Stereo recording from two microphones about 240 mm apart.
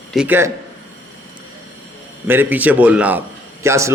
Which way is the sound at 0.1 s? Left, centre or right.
Centre.